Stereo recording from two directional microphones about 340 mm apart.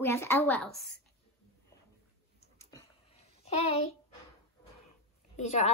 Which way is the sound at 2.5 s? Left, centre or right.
Centre.